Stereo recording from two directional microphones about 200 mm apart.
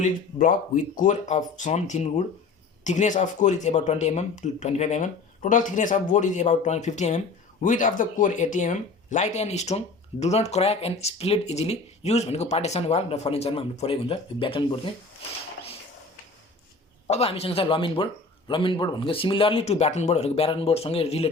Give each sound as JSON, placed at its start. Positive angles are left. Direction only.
{"t": 0.0, "sound": "speech", "side_deg": 40}
{"t": 17.1, "sound": "speech", "side_deg": 30}